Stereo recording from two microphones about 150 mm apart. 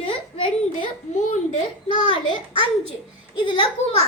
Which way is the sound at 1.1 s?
55° left (ahead or behind).